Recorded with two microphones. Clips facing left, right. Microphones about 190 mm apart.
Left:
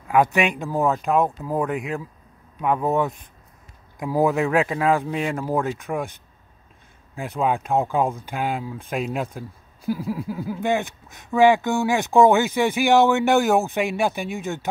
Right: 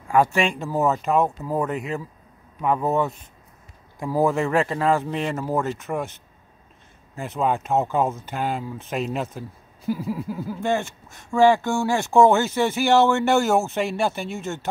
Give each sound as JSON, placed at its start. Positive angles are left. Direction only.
{"t": 0.2, "sound": "speech", "side_deg": 15}
{"t": 0.7, "sound": "speech", "side_deg": 0}
{"t": 1.2, "sound": "speech", "side_deg": 10}
{"t": 4.0, "sound": "speech", "side_deg": 15}
{"t": 4.3, "sound": "speech", "side_deg": 0}
{"t": 7.3, "sound": "speech", "side_deg": 0}
{"t": 8.1, "sound": "speech", "side_deg": 10}